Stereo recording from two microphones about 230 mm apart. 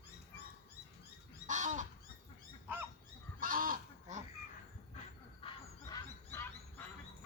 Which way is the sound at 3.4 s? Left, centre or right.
Right.